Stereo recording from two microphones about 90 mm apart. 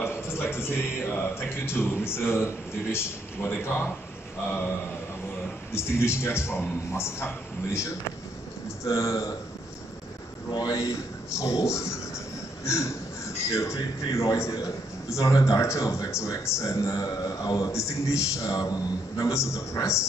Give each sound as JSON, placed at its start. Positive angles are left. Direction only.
{"t": 0.0, "sound": "a man's voice", "side_deg": 25}
{"t": 10.5, "sound": "a man's voice", "side_deg": 40}